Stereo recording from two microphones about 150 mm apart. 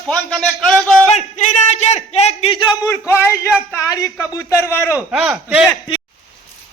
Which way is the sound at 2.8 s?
15° left (ahead or behind).